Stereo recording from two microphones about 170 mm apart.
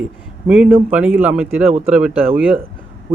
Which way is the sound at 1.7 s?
40° right (ahead or behind).